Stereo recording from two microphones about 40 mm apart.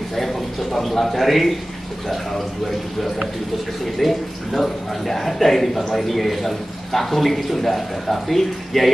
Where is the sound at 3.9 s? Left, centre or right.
Centre.